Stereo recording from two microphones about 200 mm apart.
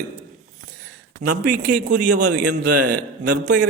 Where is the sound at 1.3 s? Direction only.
40° right (ahead or behind).